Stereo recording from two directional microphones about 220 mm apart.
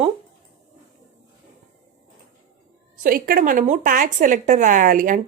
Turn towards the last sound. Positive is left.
turn(degrees=-35)  # may be behind; listen again after turning